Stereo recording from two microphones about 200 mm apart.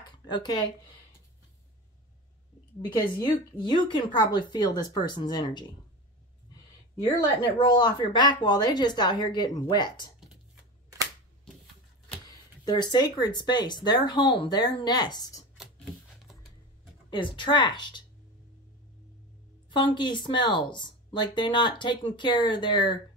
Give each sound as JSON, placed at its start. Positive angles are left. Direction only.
{"t": 0.3, "sound": "speech", "side_deg": 20}
{"t": 3.2, "sound": "speech", "side_deg": 20}
{"t": 7.1, "sound": "speech", "side_deg": 20}
{"t": 12.3, "sound": "speech", "side_deg": 20}
{"t": 17.1, "sound": "speech", "side_deg": 25}
{"t": 19.7, "sound": "speech", "side_deg": 25}